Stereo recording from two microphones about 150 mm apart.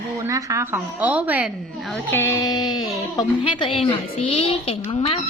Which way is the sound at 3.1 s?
35° left (ahead or behind).